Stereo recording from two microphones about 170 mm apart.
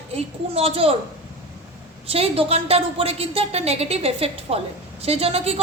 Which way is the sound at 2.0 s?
35° right (ahead or behind).